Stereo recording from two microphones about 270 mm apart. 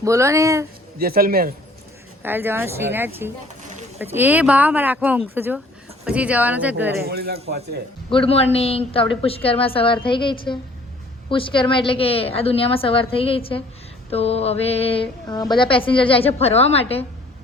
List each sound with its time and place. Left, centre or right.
0.0 s speech: centre
0.9 s a man's voice: right
2.2 s speech: centre
7.0 s a man's voice: right
8.1 s a woman's voice: left